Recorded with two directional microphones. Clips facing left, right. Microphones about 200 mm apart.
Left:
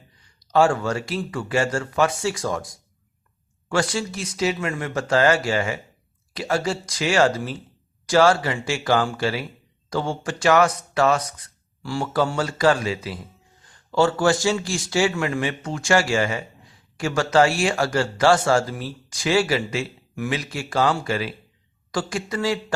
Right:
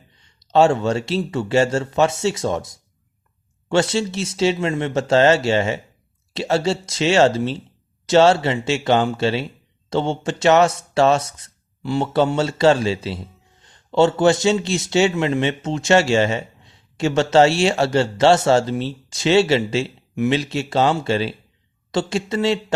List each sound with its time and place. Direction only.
0.2 s a man's voice: 25° right (ahead or behind)